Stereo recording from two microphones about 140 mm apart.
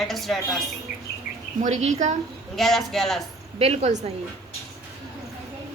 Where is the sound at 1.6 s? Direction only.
60° right (ahead or behind).